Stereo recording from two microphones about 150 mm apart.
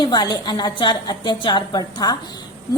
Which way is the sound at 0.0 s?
30° left (ahead or behind).